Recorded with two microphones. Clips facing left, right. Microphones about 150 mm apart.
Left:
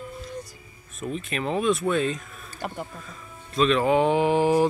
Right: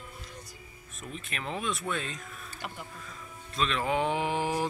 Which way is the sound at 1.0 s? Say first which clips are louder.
Left 10 dB; 35° left (ahead or behind).